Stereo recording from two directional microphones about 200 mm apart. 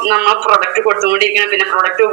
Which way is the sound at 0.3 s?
50° right (ahead or behind).